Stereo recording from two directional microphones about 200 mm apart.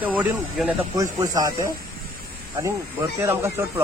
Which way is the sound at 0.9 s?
20° right (ahead or behind).